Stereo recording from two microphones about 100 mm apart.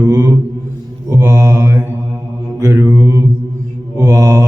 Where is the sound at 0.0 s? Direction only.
35° right (ahead or behind).